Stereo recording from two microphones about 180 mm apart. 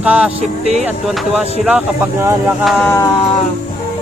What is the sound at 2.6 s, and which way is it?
Speech, centre (ahead or behind).